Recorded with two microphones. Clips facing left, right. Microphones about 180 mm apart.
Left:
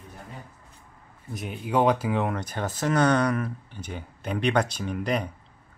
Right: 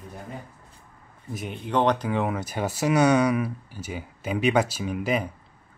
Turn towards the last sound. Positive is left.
turn(degrees=-5)  # may be behind; listen again after turning